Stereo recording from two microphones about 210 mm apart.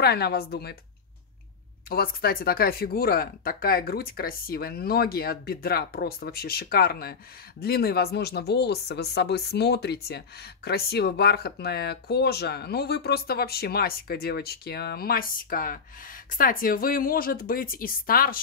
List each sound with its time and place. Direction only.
0.0 s speech: 50° left (ahead or behind)
1.9 s speech: 45° left (ahead or behind)